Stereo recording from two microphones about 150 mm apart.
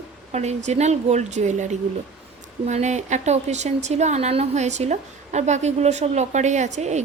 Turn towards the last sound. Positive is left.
turn(degrees=-50)  # may be behind; listen again after turning